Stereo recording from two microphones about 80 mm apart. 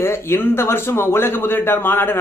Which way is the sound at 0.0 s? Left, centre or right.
Left.